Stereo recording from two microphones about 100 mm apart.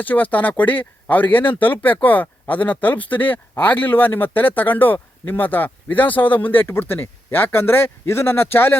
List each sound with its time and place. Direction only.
0.0 s speech: 15° left (ahead or behind)